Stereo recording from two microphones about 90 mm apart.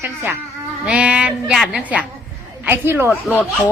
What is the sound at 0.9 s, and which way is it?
A woman's voice, 10° right (ahead or behind).